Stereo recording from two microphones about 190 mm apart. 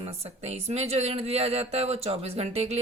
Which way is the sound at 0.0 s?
30° right (ahead or behind).